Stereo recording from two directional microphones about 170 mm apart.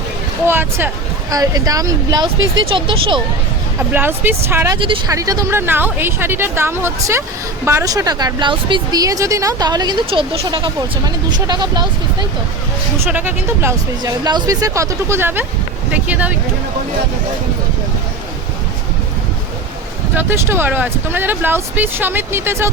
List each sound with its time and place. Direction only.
0.4 s speech: 15° right (ahead or behind); by 3.2 s 30° right (ahead or behind)
3.8 s speech: 10° right (ahead or behind)
4.8 s speech: 30° right (ahead or behind)
5.1 s speech: 20° right (ahead or behind)
13.1 s speech: 10° right (ahead or behind)
20.1 s speech: 15° right (ahead or behind)